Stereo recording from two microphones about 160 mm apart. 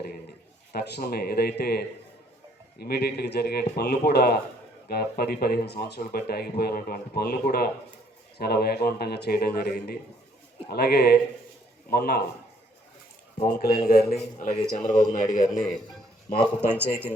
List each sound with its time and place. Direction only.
0.7 s a man's voice: 90° left
4.9 s speech: 75° left (ahead or behind)
6.0 s a man's voice: 75° left (ahead or behind)
13.4 s a man's voice: 80° left; by 15.4 s 55° left (ahead or behind)
16.6 s speech: 15° right (ahead or behind)